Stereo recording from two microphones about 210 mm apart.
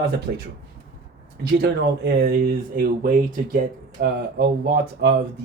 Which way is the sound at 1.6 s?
50° right (ahead or behind).